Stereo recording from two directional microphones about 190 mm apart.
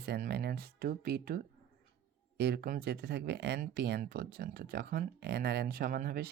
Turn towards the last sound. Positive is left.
turn(degrees=-50)  # may be behind; listen again after turning